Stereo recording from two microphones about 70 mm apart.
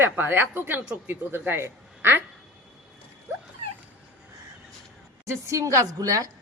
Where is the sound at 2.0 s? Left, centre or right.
Right.